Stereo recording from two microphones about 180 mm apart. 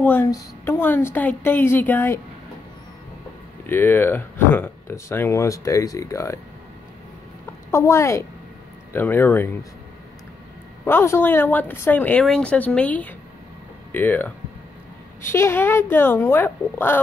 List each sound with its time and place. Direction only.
0.0 s speech: 10° left (ahead or behind)
3.6 s speech: 10° left (ahead or behind)
7.7 s speech: 15° left (ahead or behind)
10.9 s speech: 10° left (ahead or behind)